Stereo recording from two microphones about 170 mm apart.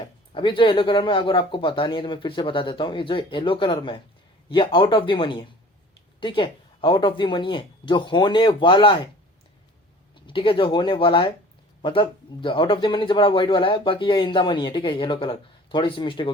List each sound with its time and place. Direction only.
0.0 s a man's voice: 30° left (ahead or behind)
10.2 s a man's voice: 30° left (ahead or behind)